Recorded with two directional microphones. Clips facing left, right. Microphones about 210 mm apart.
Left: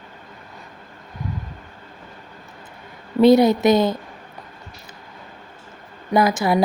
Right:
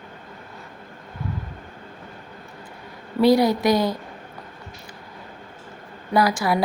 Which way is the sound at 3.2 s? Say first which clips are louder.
Left 4 dB; 20° left (ahead or behind).